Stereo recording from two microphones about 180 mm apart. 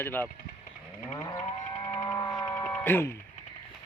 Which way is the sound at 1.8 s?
20° left (ahead or behind).